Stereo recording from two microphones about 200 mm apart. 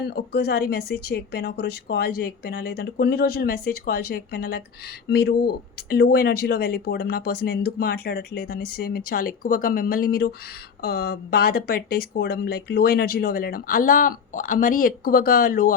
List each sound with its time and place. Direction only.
0.0 s speech: 55° left (ahead or behind)